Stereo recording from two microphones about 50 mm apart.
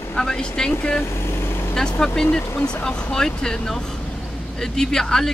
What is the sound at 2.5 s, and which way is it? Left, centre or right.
Speech, left.